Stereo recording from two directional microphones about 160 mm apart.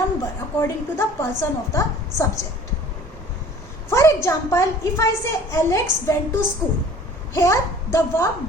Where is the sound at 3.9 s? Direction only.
20° left (ahead or behind).